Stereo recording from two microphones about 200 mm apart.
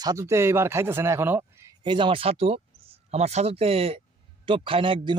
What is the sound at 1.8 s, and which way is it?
Speech, 25° right (ahead or behind).